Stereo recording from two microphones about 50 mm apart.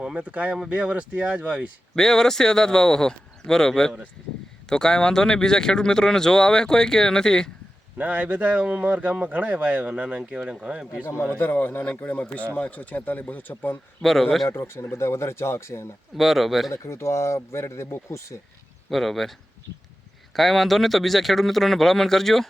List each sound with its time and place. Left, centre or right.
0.2 s speech: right
2.0 s speech: centre
7.9 s speech: right
11.3 s speech: left
12.0 s a man's voice: left
14.0 s speech: centre
14.6 s speech: left
16.1 s speech: centre
16.7 s speech: left
18.1 s speech: left
18.9 s speech: centre
20.3 s speech: centre